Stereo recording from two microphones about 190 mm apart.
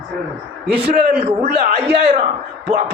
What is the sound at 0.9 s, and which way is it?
Speech, 55° right (ahead or behind).